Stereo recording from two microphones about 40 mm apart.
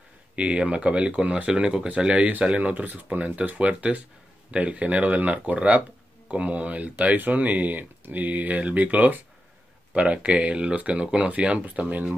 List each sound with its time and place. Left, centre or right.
0.4 s speech: right
2.7 s speech: right
9.9 s speech: right